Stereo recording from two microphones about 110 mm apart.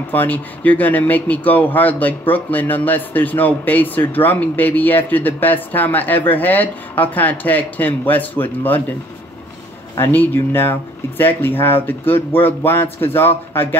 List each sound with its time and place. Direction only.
0.1 s speech: 15° left (ahead or behind)
9.9 s speech: 20° left (ahead or behind)